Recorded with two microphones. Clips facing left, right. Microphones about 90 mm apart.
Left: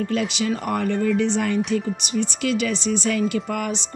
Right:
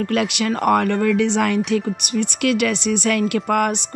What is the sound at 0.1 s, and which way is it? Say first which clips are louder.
Speech: right 3 dB; 65° right (ahead or behind).